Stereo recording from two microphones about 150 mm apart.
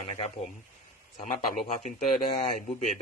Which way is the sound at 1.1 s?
65° left (ahead or behind).